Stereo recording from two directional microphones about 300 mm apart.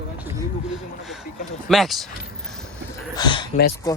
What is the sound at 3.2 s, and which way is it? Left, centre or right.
Speech, centre.